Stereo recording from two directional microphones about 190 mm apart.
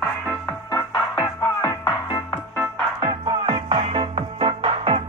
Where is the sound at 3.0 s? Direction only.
25° right (ahead or behind).